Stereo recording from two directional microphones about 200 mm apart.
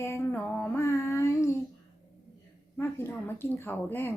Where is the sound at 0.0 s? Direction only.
15° left (ahead or behind).